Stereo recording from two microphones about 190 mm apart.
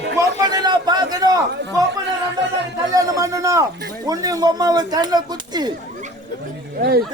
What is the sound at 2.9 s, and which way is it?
Speech, 20° right (ahead or behind).